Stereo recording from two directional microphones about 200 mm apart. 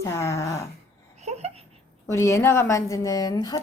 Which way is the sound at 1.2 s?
35° right (ahead or behind).